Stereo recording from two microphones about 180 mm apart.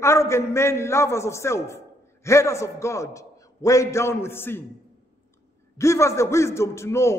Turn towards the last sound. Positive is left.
turn(degrees=15)  # may be behind; listen again after turning